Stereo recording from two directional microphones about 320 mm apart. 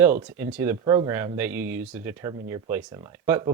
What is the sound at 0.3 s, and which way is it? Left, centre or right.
Speech, centre.